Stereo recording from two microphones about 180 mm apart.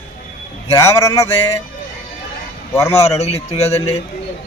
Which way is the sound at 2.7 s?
15° left (ahead or behind).